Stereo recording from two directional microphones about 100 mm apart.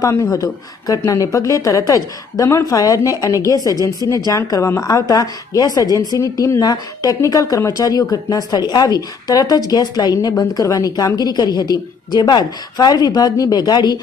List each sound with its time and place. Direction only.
0.0 s a woman's voice: 30° left (ahead or behind); by 13.9 s 45° left (ahead or behind)